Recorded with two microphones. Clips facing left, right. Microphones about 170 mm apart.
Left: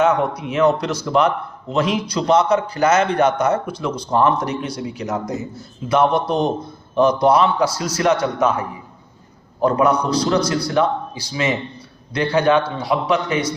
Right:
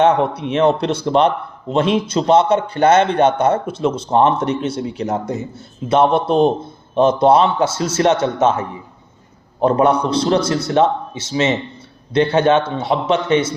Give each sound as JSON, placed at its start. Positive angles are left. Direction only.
{"t": 0.0, "sound": "a man's voice", "side_deg": -30}